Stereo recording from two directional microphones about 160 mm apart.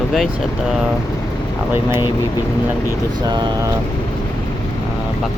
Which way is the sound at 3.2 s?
25° right (ahead or behind).